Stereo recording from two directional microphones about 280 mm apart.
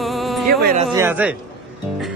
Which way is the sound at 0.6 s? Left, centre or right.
Right.